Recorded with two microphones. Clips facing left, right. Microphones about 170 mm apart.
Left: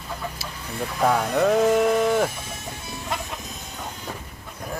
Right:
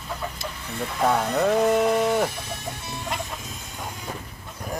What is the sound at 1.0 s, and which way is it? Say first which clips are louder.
Speech: left 1 dB; centre (ahead or behind).